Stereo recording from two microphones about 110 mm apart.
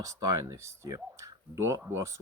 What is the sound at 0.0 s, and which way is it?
Speech, 30° right (ahead or behind).